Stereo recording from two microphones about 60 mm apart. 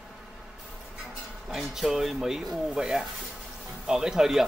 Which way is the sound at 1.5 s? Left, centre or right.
Centre.